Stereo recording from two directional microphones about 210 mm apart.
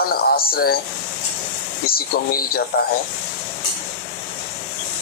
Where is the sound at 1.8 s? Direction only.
45° left (ahead or behind).